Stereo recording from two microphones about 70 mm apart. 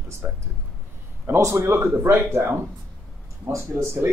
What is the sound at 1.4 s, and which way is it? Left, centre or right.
Speech, right.